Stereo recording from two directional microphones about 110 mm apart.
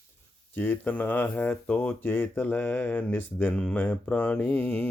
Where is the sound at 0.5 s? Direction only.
15° left (ahead or behind).